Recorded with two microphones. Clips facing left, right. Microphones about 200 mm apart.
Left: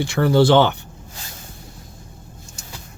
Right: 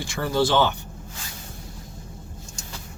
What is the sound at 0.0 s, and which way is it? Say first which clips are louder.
Speech: left 7 dB; 65° left (ahead or behind).